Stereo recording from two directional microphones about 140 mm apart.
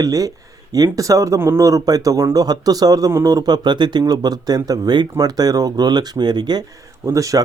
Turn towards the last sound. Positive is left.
turn(degrees=-25)  # may be behind; listen again after turning